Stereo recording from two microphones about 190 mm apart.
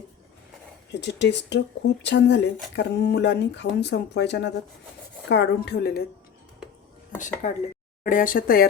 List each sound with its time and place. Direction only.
0.9 s speech: 65° left (ahead or behind)
7.4 s speech: 40° left (ahead or behind)